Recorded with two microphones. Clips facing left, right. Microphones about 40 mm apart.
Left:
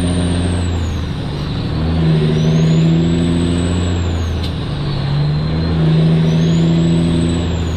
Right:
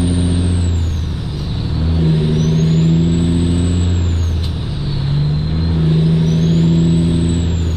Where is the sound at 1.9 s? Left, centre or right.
Left.